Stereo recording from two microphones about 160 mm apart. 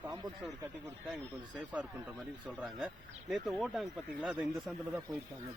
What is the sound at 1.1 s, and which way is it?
Speech, 10° right (ahead or behind).